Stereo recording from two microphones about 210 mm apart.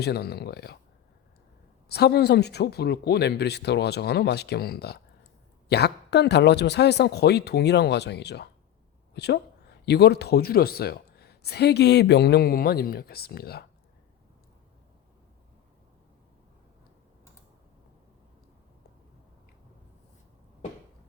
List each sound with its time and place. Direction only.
0.0 s speech: 50° left (ahead or behind)
1.9 s speech: 50° left (ahead or behind)